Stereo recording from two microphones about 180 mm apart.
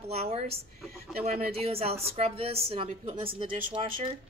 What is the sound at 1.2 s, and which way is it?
Speech, 50° right (ahead or behind).